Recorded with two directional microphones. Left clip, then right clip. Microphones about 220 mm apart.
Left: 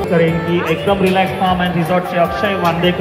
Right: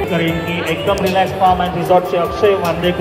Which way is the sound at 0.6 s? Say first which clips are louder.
Even; 50° right (ahead or behind).